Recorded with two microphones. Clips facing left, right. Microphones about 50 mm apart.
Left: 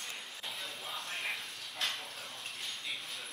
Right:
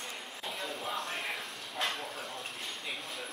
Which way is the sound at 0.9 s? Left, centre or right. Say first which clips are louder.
Right 3 dB; centre.